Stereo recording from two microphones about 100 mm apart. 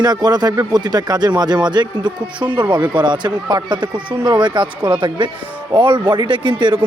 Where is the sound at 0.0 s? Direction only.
45° right (ahead or behind).